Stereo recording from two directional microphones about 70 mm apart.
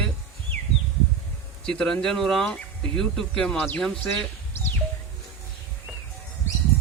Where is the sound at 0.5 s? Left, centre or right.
Left.